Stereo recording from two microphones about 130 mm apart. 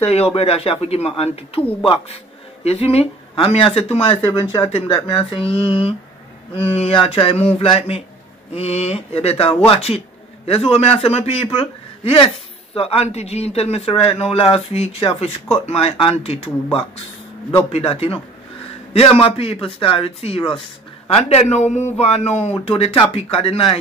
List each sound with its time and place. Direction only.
0.0 s speech: 50° left (ahead or behind)
4.3 s speech: 35° left (ahead or behind)
4.6 s speech: 50° left (ahead or behind)
8.5 s a man's voice: 55° left (ahead or behind)
17.7 s speech: 50° left (ahead or behind)